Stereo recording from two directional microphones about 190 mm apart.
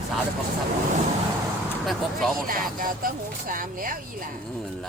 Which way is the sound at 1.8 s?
Centre (ahead or behind).